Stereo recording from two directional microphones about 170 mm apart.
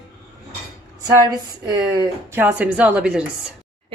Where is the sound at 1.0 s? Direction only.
25° right (ahead or behind).